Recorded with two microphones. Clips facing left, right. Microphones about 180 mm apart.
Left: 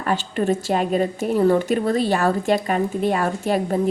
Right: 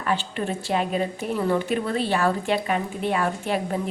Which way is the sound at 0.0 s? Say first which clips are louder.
Left 4 dB; 40° left (ahead or behind).